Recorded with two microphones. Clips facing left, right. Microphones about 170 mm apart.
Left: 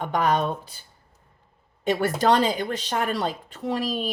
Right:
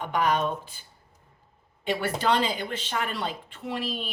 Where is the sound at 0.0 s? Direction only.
40° left (ahead or behind).